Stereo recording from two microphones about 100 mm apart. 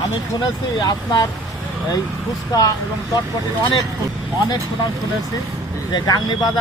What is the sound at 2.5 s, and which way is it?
Speech, 40° left (ahead or behind).